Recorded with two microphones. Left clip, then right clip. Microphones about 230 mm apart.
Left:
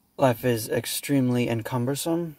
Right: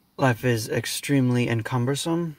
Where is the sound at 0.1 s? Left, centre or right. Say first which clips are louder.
Left 1 dB; right.